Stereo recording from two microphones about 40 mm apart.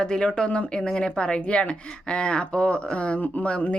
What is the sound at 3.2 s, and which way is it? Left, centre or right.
Speech, left.